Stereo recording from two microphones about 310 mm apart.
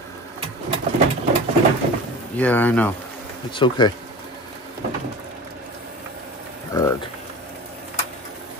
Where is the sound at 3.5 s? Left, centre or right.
Centre.